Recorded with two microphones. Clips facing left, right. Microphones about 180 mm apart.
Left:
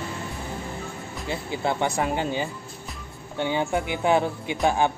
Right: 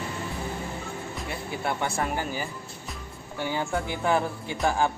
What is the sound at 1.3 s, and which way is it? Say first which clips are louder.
Speech: left 5 dB; 20° left (ahead or behind).